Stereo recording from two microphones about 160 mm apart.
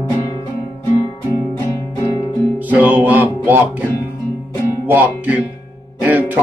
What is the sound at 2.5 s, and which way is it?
Music, 10° right (ahead or behind).